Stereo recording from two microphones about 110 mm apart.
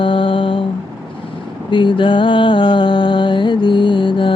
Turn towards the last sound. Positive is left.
turn(degrees=50)  # may be behind; listen again after turning